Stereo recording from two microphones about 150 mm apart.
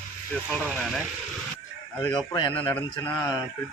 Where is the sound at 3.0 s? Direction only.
25° left (ahead or behind).